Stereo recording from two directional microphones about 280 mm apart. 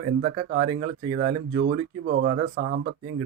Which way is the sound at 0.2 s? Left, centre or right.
Right.